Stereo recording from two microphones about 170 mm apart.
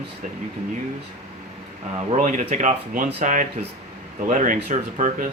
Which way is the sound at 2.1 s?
45° right (ahead or behind).